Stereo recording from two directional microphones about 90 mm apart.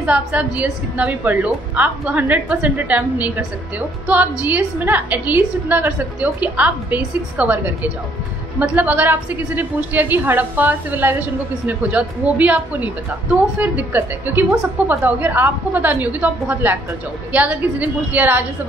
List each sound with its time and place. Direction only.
0.0 s a woman's voice: 15° right (ahead or behind)